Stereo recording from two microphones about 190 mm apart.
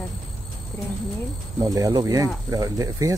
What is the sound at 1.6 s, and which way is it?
Speech, 20° right (ahead or behind).